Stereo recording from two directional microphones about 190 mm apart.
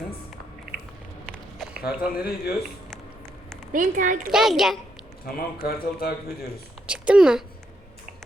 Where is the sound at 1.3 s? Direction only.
Centre (ahead or behind).